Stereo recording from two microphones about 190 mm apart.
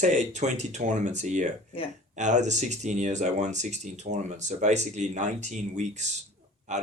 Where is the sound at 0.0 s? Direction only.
40° right (ahead or behind).